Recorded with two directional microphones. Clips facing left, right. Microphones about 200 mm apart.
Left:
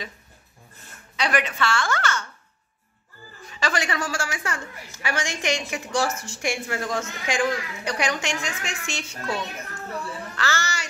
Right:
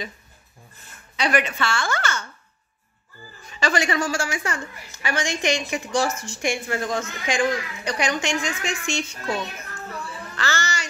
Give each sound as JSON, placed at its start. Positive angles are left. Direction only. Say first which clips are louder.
{"t": 1.1, "sound": "speech", "louder": "right 2 dB", "side_deg": 0}
{"t": 3.5, "sound": "speech", "louder": "right 4 dB", "side_deg": 5}
{"t": 10.3, "sound": "speech", "louder": "right 2 dB", "side_deg": 5}